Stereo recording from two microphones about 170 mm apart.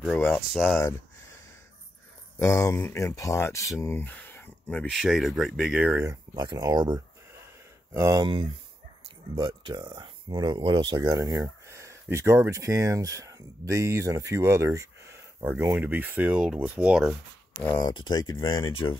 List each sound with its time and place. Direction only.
0.3 s speech: centre (ahead or behind)
2.3 s speech: 15° left (ahead or behind)
4.8 s speech: 5° right (ahead or behind)
6.3 s speech: 25° right (ahead or behind)
9.7 s speech: 25° right (ahead or behind); by 17.2 s 5° right (ahead or behind)
17.7 s speech: 25° left (ahead or behind)